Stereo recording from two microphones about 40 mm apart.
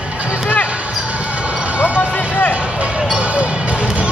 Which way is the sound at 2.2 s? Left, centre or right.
Left.